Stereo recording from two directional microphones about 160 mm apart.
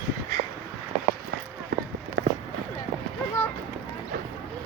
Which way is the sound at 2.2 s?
90° right.